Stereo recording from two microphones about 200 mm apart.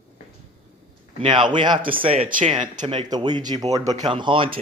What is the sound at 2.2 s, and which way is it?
Speech, 40° right (ahead or behind).